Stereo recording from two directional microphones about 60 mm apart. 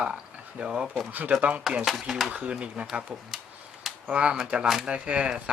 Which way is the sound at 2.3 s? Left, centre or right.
Centre.